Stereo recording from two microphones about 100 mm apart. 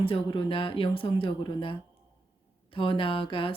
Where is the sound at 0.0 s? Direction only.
60° left (ahead or behind).